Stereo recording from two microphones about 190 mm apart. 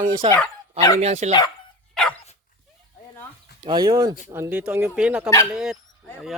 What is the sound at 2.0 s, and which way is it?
Dog, 5° left (ahead or behind).